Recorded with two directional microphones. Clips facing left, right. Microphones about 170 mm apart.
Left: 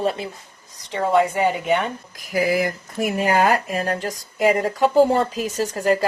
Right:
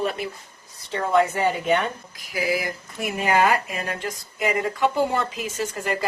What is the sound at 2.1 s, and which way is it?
Speech, 45° left (ahead or behind).